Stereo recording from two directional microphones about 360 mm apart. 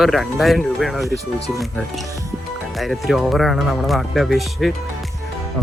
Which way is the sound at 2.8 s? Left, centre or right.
Centre.